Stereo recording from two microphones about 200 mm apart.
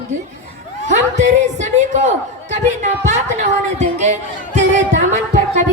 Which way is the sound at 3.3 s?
35° right (ahead or behind).